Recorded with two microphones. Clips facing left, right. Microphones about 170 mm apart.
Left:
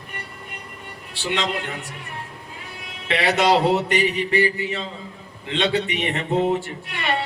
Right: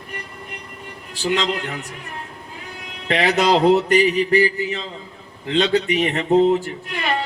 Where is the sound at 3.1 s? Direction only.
40° right (ahead or behind).